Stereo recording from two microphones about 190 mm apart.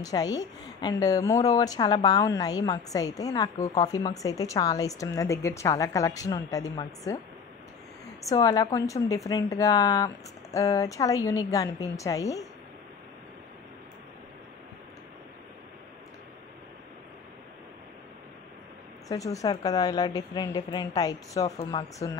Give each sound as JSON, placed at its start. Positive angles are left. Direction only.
{"t": 0.0, "sound": "a woman's voice", "side_deg": 20}
{"t": 8.3, "sound": "a woman's voice", "side_deg": 20}
{"t": 19.0, "sound": "a woman's voice", "side_deg": 15}